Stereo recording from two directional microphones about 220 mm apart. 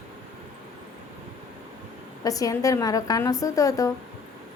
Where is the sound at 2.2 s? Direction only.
15° left (ahead or behind).